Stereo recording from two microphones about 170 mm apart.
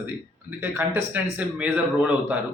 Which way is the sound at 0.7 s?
10° right (ahead or behind).